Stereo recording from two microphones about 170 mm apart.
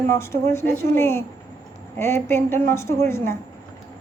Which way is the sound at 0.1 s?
15° left (ahead or behind).